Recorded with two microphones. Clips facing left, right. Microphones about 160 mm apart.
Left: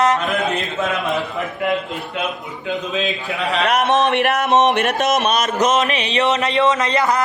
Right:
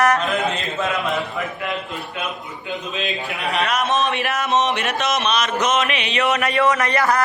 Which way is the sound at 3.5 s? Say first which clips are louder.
Left 4 dB; 65° left (ahead or behind).